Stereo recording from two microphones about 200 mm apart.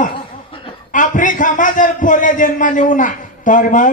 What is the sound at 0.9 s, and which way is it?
A man's voice, 40° left (ahead or behind).